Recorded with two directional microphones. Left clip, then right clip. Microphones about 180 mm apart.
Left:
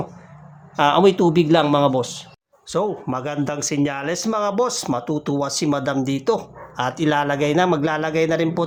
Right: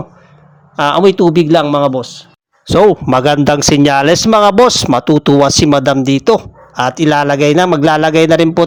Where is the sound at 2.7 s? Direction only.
50° right (ahead or behind).